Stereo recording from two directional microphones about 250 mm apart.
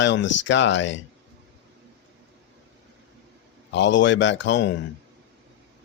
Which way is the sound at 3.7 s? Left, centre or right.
Left.